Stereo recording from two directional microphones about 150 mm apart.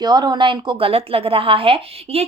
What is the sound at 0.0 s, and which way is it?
A woman's voice, 30° right (ahead or behind).